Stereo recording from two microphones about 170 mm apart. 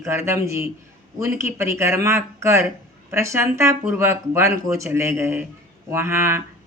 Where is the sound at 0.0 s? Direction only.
15° right (ahead or behind).